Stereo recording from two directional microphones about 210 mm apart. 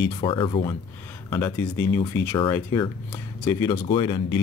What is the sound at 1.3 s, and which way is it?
Speech, 10° left (ahead or behind).